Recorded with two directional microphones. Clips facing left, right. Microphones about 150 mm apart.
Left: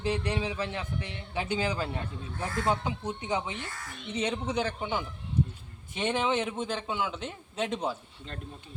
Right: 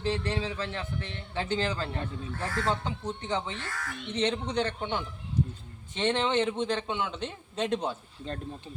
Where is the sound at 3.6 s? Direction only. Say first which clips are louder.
Right 3 dB; 85° right.